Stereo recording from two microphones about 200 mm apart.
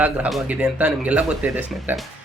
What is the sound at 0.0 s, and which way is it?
Speech, 5° right (ahead or behind).